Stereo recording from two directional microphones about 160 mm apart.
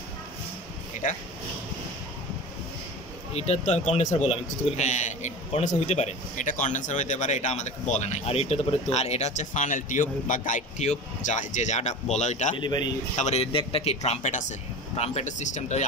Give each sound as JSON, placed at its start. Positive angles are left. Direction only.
{"t": 3.3, "sound": "a man's voice", "side_deg": 40}
{"t": 12.5, "sound": "a man's voice", "side_deg": 30}
{"t": 13.1, "sound": "a man's voice", "side_deg": 45}